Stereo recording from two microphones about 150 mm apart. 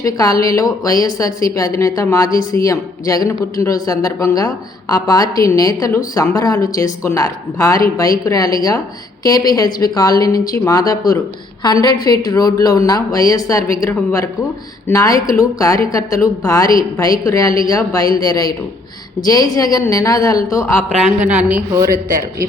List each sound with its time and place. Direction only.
0.0 s speech: 25° left (ahead or behind)
21.2 s a woman's voice: 10° right (ahead or behind)